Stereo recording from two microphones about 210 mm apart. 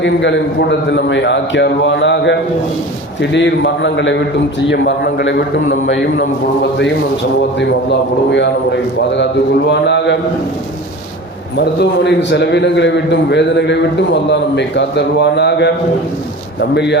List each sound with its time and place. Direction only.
0.0 s a man's voice: 60° left (ahead or behind)
11.5 s a man's voice: 55° left (ahead or behind)